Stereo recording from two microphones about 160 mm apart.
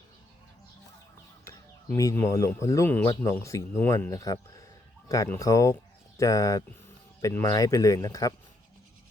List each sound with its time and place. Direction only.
2.0 s speech: 20° left (ahead or behind)